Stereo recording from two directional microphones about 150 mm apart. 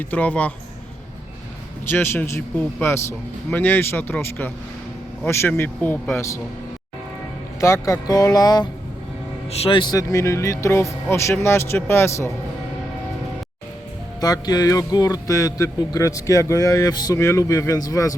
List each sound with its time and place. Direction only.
0.0 s a man's voice: 10° left (ahead or behind)
1.9 s a man's voice: 15° left (ahead or behind)
7.6 s speech: 20° left (ahead or behind)
9.5 s speech: 40° left (ahead or behind); by 12.3 s 15° left (ahead or behind)
14.2 s speech: 25° left (ahead or behind)